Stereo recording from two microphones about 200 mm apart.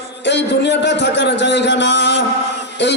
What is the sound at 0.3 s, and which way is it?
Music, 60° left (ahead or behind).